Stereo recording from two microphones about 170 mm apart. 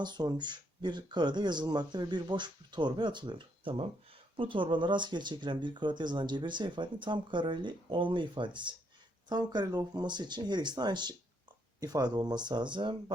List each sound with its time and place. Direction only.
0.0 s speech: 25° right (ahead or behind)